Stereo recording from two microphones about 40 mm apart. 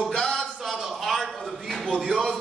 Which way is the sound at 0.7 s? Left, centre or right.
Centre.